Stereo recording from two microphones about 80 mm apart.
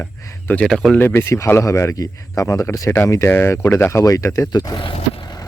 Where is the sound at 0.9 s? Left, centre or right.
Left.